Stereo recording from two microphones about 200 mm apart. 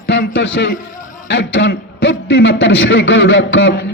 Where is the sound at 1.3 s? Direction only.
65° left (ahead or behind).